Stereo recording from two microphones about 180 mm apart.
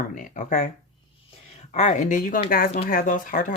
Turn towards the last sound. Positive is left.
turn(degrees=45)  # may be behind; listen again after turning